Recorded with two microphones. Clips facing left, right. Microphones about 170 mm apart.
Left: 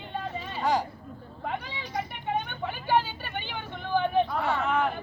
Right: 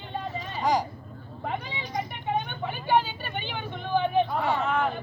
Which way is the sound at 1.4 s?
10° right (ahead or behind).